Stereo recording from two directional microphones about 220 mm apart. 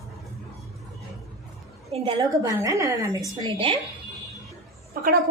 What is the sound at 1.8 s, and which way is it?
Speech, 30° right (ahead or behind).